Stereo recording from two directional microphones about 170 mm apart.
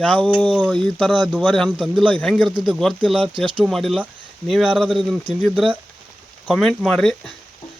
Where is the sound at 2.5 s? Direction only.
25° right (ahead or behind).